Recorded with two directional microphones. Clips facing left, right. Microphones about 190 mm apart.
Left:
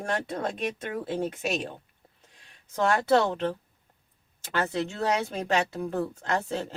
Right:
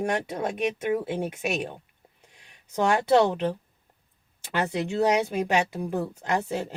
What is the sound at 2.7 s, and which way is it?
Speech, 15° right (ahead or behind).